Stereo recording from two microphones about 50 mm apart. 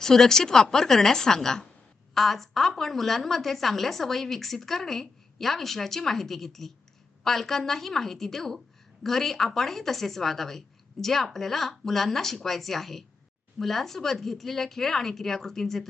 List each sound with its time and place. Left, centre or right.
0.0 s a woman's voice: centre